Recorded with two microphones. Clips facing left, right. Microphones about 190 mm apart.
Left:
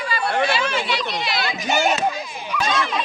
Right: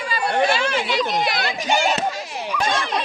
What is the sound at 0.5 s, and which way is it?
Speech, 45° right (ahead or behind).